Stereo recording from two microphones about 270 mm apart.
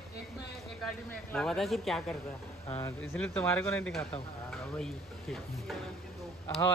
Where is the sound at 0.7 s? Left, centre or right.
Centre.